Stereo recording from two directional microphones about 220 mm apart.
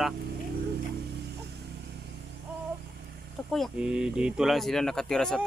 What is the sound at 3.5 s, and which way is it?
Speech, centre (ahead or behind).